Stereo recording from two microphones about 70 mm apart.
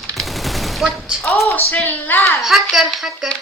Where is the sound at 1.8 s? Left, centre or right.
Left.